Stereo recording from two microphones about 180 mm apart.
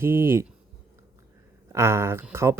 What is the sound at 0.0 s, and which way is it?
Speech, 15° right (ahead or behind).